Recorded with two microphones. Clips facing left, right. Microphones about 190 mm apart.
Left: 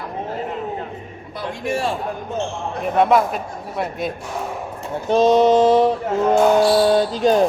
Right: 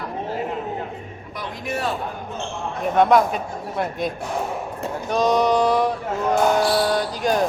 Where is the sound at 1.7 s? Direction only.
30° left (ahead or behind).